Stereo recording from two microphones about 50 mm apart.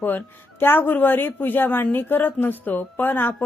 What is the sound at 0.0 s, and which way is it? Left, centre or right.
A woman's voice, left.